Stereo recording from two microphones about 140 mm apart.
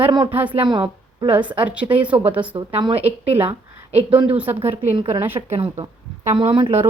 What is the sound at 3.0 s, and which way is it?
Speech, 15° right (ahead or behind).